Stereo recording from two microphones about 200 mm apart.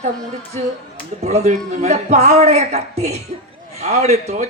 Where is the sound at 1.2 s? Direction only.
35° right (ahead or behind).